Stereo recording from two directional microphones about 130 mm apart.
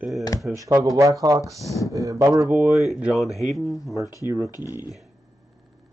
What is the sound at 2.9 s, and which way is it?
Speech, 5° right (ahead or behind).